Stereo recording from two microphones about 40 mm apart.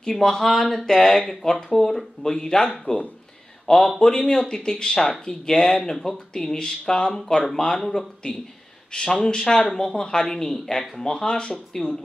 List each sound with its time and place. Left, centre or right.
0.0 s speech: centre
0.3 s a man's voice: centre
8.9 s speech: left